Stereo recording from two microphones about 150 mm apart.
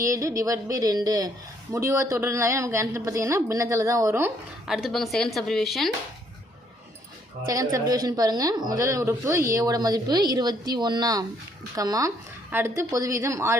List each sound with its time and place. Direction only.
0.0 s speech: 20° right (ahead or behind)
4.6 s speech: centre (ahead or behind)
7.4 s speech: 20° right (ahead or behind)